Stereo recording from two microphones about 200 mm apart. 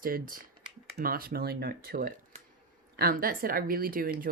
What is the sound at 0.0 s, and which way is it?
Speech, 45° right (ahead or behind).